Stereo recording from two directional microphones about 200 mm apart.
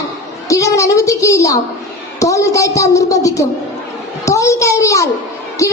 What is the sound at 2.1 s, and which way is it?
A woman's voice, 15° left (ahead or behind).